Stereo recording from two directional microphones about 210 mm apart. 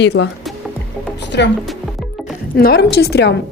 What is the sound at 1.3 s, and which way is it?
Speech, 55° left (ahead or behind).